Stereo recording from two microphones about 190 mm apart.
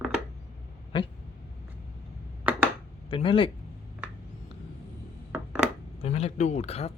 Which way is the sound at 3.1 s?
30° left (ahead or behind).